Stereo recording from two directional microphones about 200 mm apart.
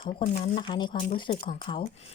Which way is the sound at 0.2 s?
25° left (ahead or behind).